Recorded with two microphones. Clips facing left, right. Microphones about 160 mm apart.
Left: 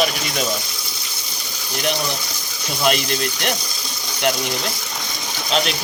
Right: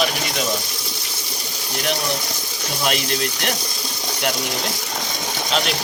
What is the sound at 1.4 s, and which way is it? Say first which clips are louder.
Ratchet: left 1 dB; centre (ahead or behind).